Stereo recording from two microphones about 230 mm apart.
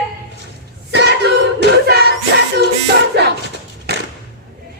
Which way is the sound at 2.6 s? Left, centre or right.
Right.